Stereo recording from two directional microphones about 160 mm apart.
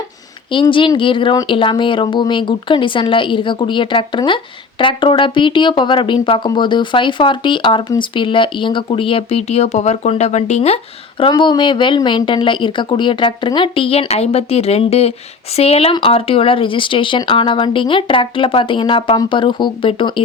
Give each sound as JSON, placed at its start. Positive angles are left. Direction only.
{"t": 0.5, "sound": "speech", "side_deg": 30}
{"t": 11.2, "sound": "speech", "side_deg": 30}